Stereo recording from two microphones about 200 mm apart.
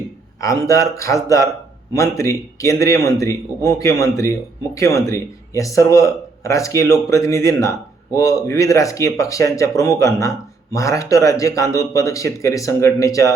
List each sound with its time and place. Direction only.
0.4 s a man's voice: 15° left (ahead or behind)